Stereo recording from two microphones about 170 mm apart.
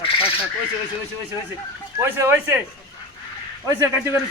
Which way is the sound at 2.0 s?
15° right (ahead or behind).